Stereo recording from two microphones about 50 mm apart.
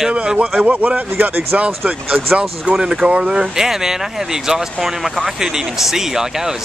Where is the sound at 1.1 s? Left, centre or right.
Right.